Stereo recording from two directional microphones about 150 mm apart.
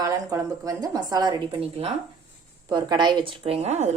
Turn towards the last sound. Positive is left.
turn(degrees=-50)  # may be behind; listen again after turning